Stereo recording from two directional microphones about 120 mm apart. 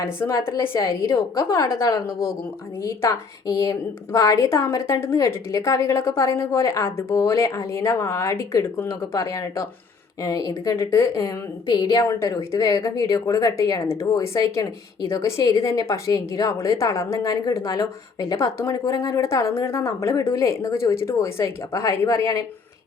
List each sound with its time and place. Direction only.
0.0 s a woman's voice: 25° left (ahead or behind)
12.0 s a woman's voice: 25° left (ahead or behind)